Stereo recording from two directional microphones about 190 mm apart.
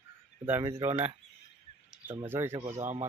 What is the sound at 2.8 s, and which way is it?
Speech, 40° right (ahead or behind).